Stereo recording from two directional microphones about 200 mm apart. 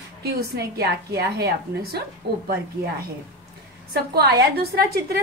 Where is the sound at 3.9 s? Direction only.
50° right (ahead or behind).